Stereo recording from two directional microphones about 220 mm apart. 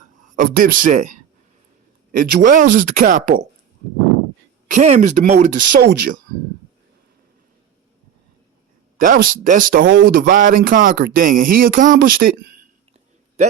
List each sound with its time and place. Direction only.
0.3 s speech: 40° right (ahead or behind)
4.7 s speech: 35° right (ahead or behind)
9.0 s speech: 35° right (ahead or behind)
9.9 s speech: 55° right (ahead or behind)
10.2 s speech: 40° right (ahead or behind)